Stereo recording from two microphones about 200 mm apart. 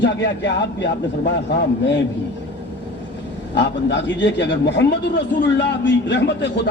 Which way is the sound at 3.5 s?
65° left (ahead or behind).